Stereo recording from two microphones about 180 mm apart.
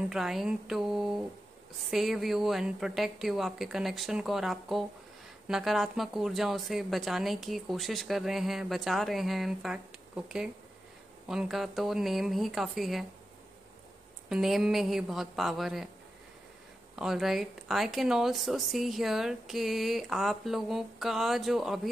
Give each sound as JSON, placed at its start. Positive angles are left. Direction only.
{"t": 0.1, "sound": "a woman's voice", "side_deg": 0}
{"t": 14.3, "sound": "a woman's voice", "side_deg": 0}
{"t": 16.9, "sound": "a woman's voice", "side_deg": 0}